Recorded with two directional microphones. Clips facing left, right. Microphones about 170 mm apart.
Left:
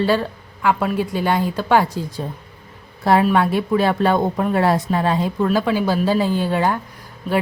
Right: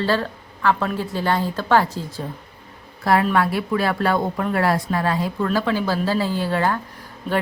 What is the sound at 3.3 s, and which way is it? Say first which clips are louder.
Speech: left 3 dB; 20° left (ahead or behind).